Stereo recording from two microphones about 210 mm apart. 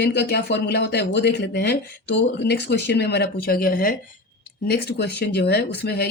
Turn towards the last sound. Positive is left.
turn(degrees=50)  # may be behind; listen again after turning